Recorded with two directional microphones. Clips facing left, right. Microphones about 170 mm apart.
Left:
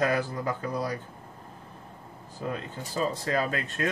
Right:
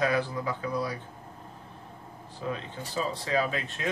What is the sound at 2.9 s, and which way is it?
Speech, 45° left (ahead or behind).